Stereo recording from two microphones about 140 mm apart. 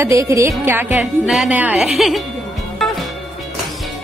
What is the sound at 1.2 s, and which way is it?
A woman's voice, 5° right (ahead or behind).